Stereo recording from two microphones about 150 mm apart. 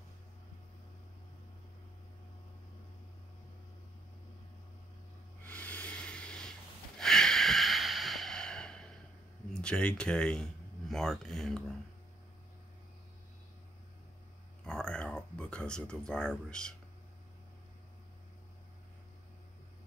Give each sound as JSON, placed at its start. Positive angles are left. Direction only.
{"t": 5.4, "sound": "sanding", "side_deg": 10}
{"t": 7.0, "sound": "snort", "side_deg": 5}
{"t": 9.5, "sound": "speech", "side_deg": 5}
{"t": 14.6, "sound": "a sound", "side_deg": 5}